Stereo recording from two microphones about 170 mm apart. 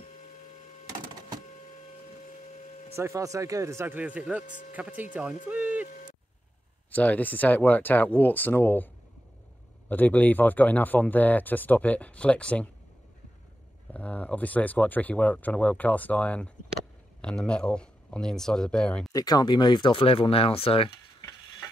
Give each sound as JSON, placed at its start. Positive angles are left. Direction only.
{"t": 3.0, "sound": "speech", "side_deg": -20}
{"t": 6.9, "sound": "speech", "side_deg": 10}
{"t": 13.9, "sound": "speech", "side_deg": 10}
{"t": 19.1, "sound": "speech", "side_deg": 20}